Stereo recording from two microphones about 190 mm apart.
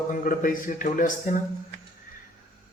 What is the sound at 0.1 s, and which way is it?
A man's voice, 45° left (ahead or behind).